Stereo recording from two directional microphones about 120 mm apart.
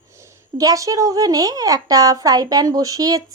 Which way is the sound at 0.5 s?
30° right (ahead or behind).